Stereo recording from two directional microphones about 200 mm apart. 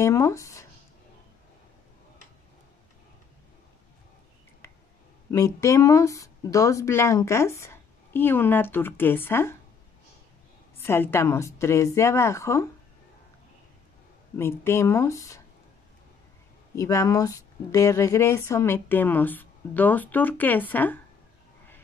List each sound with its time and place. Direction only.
0.0 s speech: 15° left (ahead or behind)
5.3 s speech: 15° left (ahead or behind)
10.8 s speech: 10° left (ahead or behind)
14.3 s speech: 10° left (ahead or behind)
16.7 s speech: 15° left (ahead or behind)